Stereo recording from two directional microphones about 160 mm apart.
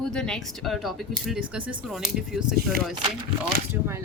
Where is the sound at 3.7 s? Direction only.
15° right (ahead or behind).